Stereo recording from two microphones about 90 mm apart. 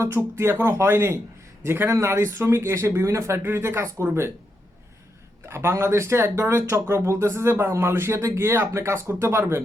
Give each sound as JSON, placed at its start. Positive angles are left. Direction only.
{"t": 0.0, "sound": "speech", "side_deg": -30}
{"t": 5.5, "sound": "speech", "side_deg": -30}